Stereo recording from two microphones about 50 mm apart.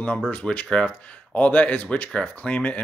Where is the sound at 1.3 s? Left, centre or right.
Left.